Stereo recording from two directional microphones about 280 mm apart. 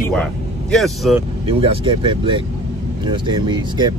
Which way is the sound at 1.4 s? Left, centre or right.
Centre.